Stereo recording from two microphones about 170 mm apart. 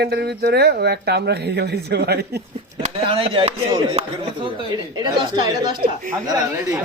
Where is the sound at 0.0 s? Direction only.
75° right (ahead or behind).